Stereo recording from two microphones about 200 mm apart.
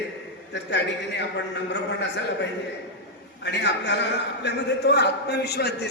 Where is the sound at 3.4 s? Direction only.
60° left (ahead or behind).